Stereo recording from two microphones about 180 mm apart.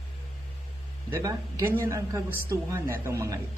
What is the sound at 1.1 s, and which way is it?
A woman's voice, 20° right (ahead or behind).